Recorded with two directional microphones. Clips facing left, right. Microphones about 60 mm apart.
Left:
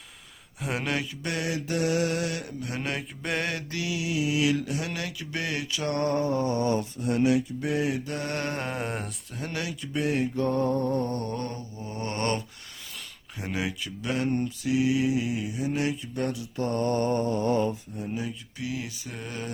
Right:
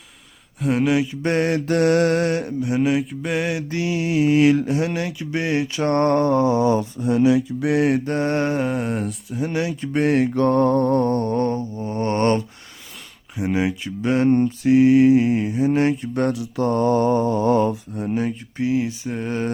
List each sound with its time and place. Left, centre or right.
0.6 s mantra: centre
1.0 s mantra: right
2.6 s mantra: centre
3.7 s a sound: right
6.0 s mantra: right
7.6 s mantra: right
8.0 s speech: right
8.5 s mantra: centre
9.5 s speech: right
9.8 s mantra: right
13.3 s speech: right
14.3 s mantra: right
17.4 s mantra: right
18.5 s speech: right